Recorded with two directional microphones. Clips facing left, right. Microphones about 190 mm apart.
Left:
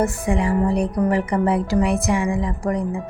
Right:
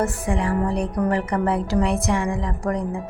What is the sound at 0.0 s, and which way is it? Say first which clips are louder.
A woman's voice: left 2 dB; 15° left (ahead or behind).